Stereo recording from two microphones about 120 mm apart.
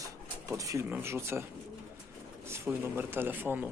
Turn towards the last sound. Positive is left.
turn(degrees=-15)  # may be behind; listen again after turning